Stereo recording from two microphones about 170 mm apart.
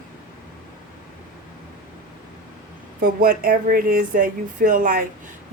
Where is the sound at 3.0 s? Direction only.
60° right (ahead or behind).